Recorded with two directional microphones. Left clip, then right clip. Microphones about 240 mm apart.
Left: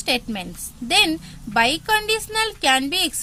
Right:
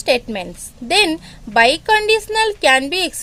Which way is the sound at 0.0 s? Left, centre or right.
Centre.